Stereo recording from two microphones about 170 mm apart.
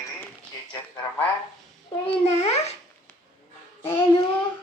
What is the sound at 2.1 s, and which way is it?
Speech, 35° left (ahead or behind).